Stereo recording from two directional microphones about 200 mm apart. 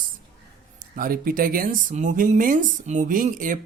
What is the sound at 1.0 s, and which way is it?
Speech, 45° right (ahead or behind).